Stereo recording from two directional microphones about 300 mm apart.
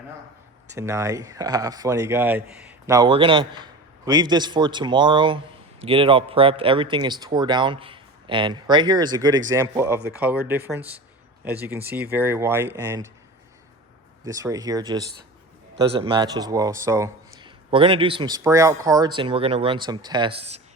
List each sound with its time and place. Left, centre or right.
0.7 s speech: centre
14.3 s speech: centre